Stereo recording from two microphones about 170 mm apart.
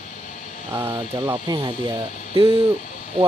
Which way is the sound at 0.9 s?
25° right (ahead or behind).